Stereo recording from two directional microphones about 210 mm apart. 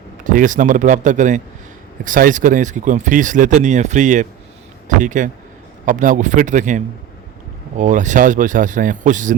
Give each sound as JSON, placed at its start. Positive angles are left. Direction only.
{"t": 0.3, "sound": "speech", "side_deg": -35}